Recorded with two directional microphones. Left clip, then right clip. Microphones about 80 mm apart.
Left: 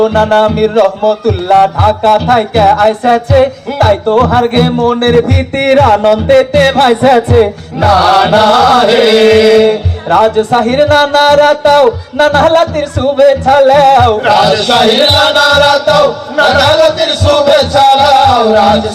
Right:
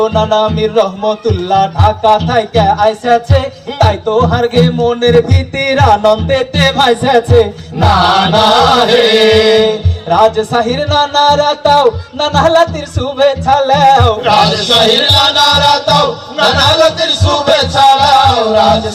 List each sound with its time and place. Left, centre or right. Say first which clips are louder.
0.0 s music: left 3 dB; left
13.4 s music: left 3 dB; left